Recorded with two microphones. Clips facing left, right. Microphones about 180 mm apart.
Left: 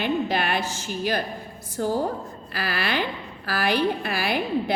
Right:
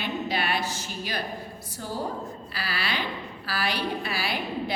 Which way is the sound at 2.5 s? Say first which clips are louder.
Left 6 dB; 50° left (ahead or behind).